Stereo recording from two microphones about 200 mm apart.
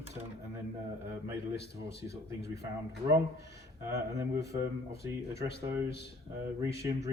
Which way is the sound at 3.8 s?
15° right (ahead or behind).